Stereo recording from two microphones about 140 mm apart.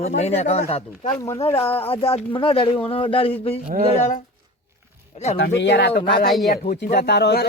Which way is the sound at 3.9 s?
60° left (ahead or behind).